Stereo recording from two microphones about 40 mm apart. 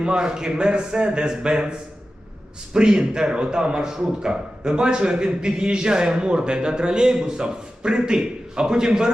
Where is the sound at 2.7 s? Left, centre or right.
Right.